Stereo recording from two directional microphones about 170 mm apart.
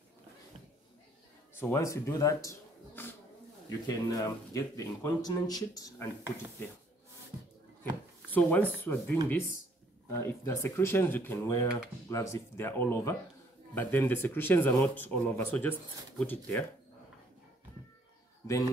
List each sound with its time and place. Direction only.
1.5 s a man's voice: 15° left (ahead or behind)
7.8 s speech: 10° left (ahead or behind)
10.2 s speech: 15° left (ahead or behind)